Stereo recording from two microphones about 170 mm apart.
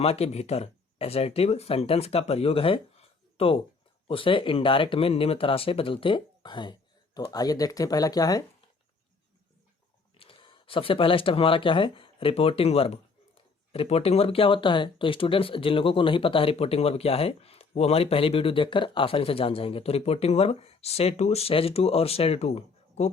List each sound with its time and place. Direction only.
0.0 s speech: 35° left (ahead or behind); by 8.4 s 20° left (ahead or behind)
10.2 s speech: 30° left (ahead or behind)